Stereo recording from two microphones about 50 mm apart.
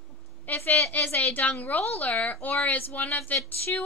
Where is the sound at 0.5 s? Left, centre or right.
Left.